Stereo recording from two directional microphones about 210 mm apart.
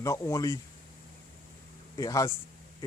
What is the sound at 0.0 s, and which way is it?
Speech, 15° left (ahead or behind).